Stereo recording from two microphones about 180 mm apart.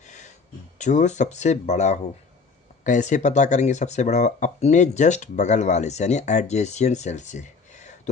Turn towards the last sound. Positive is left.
turn(degrees=40)  # may be behind; listen again after turning